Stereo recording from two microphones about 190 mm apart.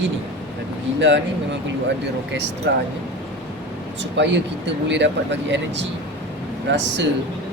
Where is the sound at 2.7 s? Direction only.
65° right (ahead or behind).